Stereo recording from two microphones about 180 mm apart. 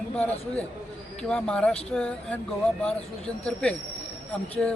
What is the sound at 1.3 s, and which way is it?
Speech, 5° left (ahead or behind).